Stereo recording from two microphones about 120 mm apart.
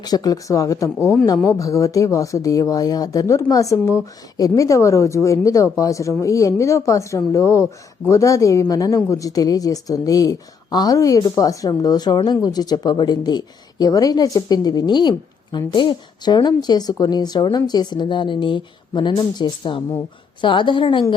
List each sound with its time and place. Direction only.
0.0 s a woman's voice: 30° left (ahead or behind)